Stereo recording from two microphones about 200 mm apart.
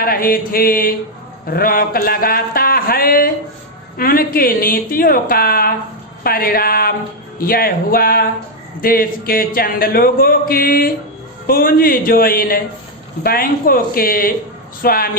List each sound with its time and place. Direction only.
0.0 s speech: 45° left (ahead or behind)